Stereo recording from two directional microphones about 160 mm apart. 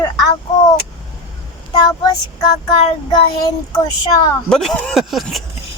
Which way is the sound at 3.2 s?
30° left (ahead or behind).